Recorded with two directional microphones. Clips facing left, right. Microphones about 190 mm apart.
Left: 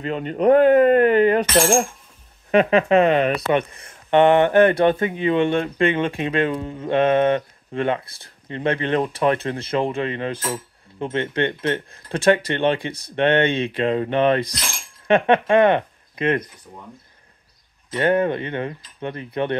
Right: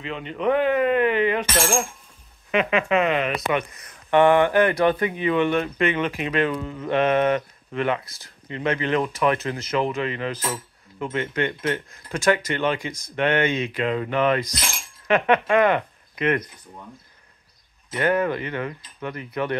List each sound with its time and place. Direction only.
0.0 s speech: 45° left (ahead or behind); by 16.4 s 25° left (ahead or behind)
17.9 s speech: 30° left (ahead or behind)